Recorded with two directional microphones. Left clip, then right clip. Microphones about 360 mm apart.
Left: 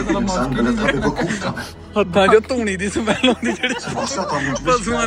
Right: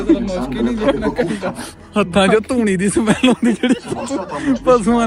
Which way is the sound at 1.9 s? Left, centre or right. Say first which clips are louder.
Left 1 dB; right.